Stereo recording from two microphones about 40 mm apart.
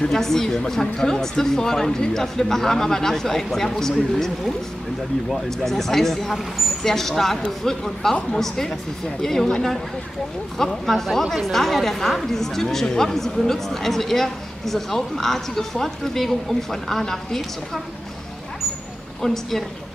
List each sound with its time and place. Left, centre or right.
0.0 s speech: centre
5.3 s speech: centre
10.6 s speech: centre
19.2 s speech: centre